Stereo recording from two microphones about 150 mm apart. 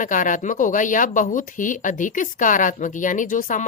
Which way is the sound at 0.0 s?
60° left (ahead or behind).